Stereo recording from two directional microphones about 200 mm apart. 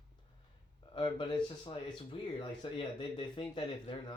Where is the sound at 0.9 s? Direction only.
25° left (ahead or behind).